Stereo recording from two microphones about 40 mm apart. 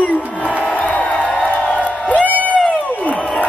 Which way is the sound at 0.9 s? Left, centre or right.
Left.